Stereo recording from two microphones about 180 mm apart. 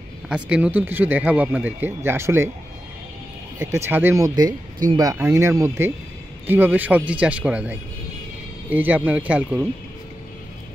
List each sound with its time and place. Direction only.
0.3 s speech: 5° right (ahead or behind)
3.5 s speech: 15° right (ahead or behind)